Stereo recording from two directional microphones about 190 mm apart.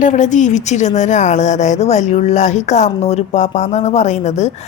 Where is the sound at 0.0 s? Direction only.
40° left (ahead or behind).